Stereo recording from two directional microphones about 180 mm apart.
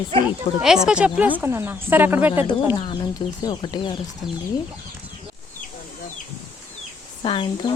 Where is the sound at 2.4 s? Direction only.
30° left (ahead or behind).